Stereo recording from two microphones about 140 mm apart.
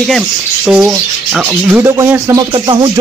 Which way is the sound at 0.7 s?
5° right (ahead or behind).